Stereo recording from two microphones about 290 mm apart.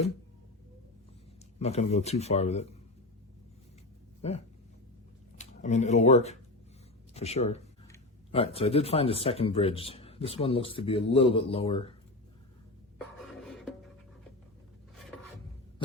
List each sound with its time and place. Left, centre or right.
1.5 s speech: left
4.2 s speech: left
5.4 s speech: left
13.1 s a sound: centre